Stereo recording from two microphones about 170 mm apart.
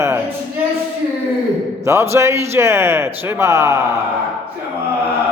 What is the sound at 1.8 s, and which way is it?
Speech, 15° right (ahead or behind).